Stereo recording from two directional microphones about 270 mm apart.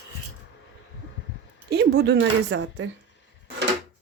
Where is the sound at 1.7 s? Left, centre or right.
Right.